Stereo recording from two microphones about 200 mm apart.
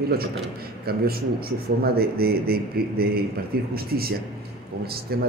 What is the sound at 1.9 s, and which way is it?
Speech, 50° right (ahead or behind).